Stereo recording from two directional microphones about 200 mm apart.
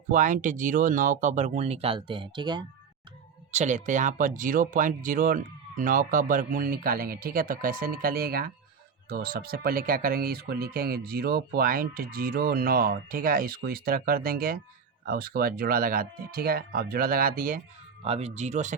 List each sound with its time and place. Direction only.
0.1 s speech: 40° right (ahead or behind); by 2.6 s 20° right (ahead or behind)
3.5 s speech: 35° right (ahead or behind)
18.0 s speech: 30° right (ahead or behind)